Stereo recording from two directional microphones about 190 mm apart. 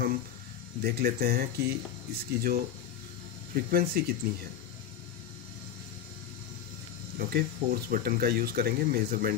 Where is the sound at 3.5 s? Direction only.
55° right (ahead or behind).